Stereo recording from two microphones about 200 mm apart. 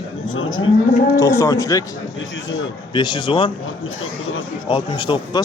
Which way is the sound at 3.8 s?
90° left.